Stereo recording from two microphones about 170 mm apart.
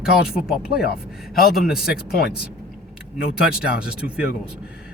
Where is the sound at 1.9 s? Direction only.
65° left (ahead or behind).